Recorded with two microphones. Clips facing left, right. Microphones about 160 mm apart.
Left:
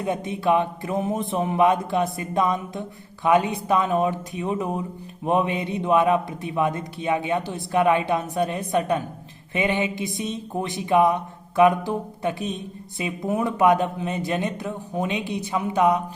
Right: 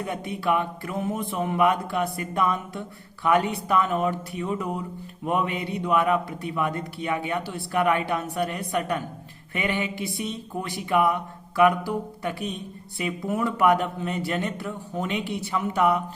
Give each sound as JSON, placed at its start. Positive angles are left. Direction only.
{"t": 0.0, "sound": "speech", "side_deg": 20}